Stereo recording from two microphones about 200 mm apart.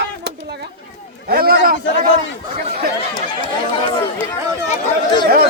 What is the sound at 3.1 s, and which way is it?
Chatter, 20° left (ahead or behind).